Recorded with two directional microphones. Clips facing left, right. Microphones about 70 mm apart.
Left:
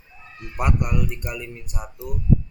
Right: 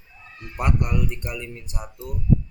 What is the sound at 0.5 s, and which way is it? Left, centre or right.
Speech, centre.